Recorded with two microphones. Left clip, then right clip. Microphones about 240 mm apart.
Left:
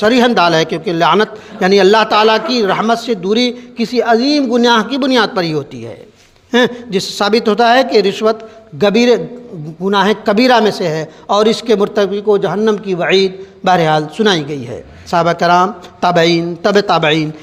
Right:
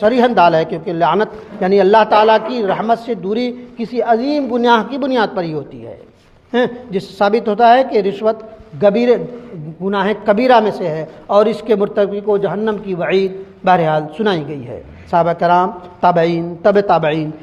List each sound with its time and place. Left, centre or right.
0.0 s a man's voice: left